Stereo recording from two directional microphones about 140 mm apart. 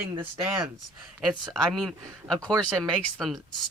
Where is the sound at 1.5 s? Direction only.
Centre (ahead or behind).